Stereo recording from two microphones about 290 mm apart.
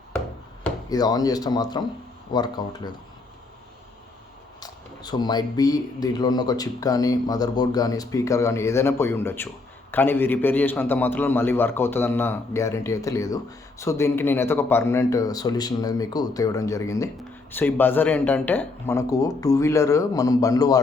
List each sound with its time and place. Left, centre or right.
0.6 s a man's voice: centre
4.6 s a man's voice: centre